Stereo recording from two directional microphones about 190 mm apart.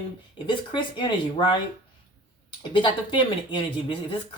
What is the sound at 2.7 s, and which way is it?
Speech, 25° left (ahead or behind).